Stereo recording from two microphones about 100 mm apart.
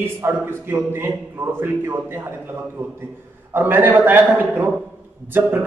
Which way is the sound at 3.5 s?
20° right (ahead or behind).